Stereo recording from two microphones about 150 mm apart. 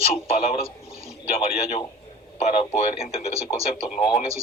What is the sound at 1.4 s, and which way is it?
Speech, 40° left (ahead or behind).